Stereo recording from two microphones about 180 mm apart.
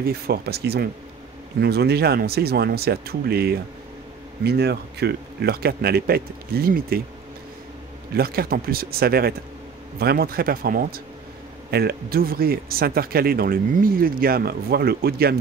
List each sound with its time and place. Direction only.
0.0 s speech: 60° right (ahead or behind)
8.1 s speech: 60° right (ahead or behind)